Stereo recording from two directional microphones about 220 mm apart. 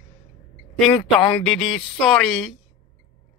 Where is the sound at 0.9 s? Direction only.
20° left (ahead or behind).